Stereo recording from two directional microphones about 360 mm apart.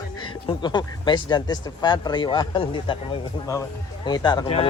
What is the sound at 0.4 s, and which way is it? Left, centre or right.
Speech, centre.